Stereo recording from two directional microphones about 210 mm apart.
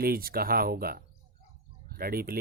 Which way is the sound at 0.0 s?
45° right (ahead or behind).